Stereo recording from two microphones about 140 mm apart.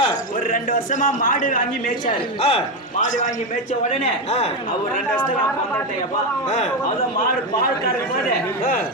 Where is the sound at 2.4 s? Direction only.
45° left (ahead or behind).